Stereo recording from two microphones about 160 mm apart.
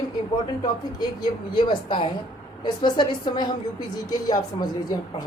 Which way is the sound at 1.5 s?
30° left (ahead or behind).